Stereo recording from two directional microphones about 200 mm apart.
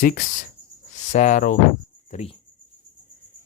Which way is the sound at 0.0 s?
45° left (ahead or behind).